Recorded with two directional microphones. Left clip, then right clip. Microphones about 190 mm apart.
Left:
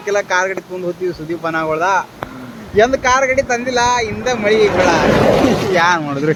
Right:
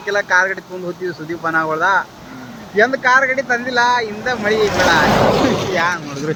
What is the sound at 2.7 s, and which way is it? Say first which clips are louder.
Speech: left 1 dB; 20° left (ahead or behind).